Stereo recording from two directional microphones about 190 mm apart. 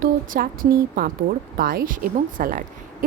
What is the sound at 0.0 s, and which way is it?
Speech, 50° right (ahead or behind).